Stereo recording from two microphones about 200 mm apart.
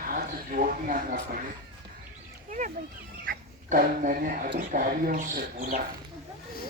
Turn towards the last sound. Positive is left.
turn(degrees=-40)  # may be behind; listen again after turning